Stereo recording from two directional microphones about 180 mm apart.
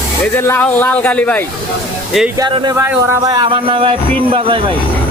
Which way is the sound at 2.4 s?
25° right (ahead or behind).